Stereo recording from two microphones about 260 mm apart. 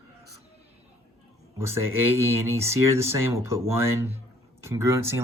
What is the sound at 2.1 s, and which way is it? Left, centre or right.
Speech, centre.